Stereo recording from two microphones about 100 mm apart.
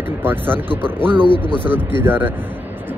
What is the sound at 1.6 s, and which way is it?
Speech, 20° right (ahead or behind).